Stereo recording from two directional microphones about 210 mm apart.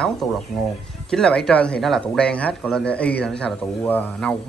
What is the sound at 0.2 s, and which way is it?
A man's voice, centre (ahead or behind).